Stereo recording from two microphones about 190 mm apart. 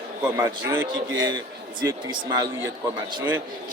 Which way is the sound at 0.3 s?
15° right (ahead or behind).